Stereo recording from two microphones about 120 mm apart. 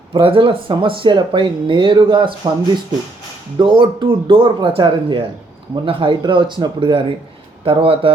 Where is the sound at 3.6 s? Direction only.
45° right (ahead or behind).